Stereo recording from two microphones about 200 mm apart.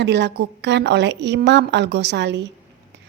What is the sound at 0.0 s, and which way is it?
A woman's voice, 60° right (ahead or behind).